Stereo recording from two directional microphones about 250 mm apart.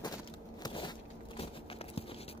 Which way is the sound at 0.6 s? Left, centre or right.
Centre.